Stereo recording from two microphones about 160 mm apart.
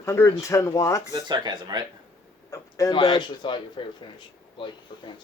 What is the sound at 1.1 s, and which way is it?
Speech, 25° right (ahead or behind).